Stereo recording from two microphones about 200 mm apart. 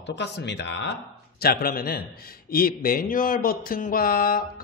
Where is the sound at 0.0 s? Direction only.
60° left (ahead or behind).